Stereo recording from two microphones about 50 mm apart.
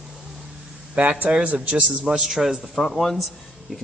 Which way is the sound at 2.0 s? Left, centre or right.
Centre.